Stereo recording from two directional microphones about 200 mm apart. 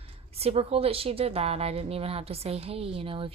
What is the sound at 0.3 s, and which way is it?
A woman's voice, 30° right (ahead or behind).